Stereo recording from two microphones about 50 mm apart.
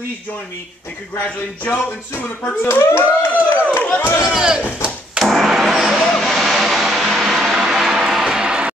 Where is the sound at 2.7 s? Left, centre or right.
Left.